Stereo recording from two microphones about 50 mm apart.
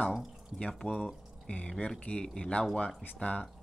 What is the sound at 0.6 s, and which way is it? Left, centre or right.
Speech, centre.